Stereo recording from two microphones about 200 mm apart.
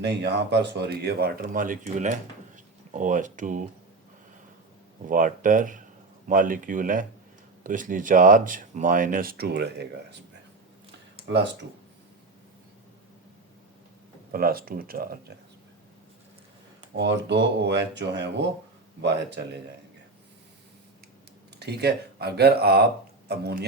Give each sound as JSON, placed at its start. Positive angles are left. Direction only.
{"t": 0.0, "sound": "speech", "side_deg": -55}
{"t": 5.0, "sound": "speech", "side_deg": -40}
{"t": 14.3, "sound": "speech", "side_deg": -45}
{"t": 17.0, "sound": "speech", "side_deg": -60}
{"t": 21.6, "sound": "speech", "side_deg": -55}